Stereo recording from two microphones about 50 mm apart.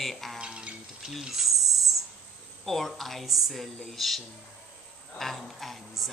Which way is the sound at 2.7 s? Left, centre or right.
Centre.